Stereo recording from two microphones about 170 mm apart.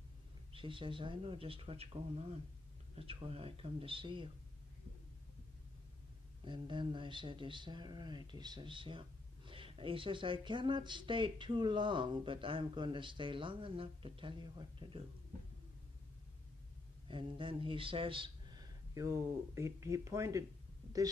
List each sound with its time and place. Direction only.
0.5 s speech: 30° right (ahead or behind)
6.4 s speech: 30° right (ahead or behind)
17.1 s speech: 30° right (ahead or behind)